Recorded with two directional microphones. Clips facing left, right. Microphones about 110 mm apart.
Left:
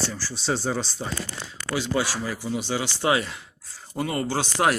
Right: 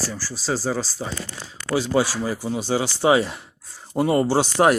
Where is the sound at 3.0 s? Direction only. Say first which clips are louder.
Right 6 dB; 20° right (ahead or behind).